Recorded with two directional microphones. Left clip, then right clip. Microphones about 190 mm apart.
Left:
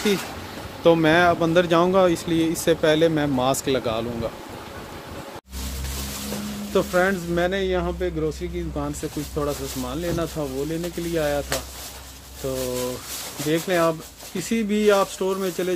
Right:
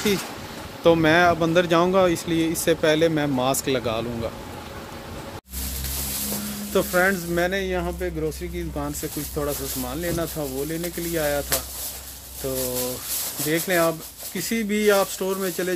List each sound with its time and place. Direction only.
0.8 s speech: centre (ahead or behind)
6.7 s speech: 5° right (ahead or behind)
13.5 s speech: centre (ahead or behind)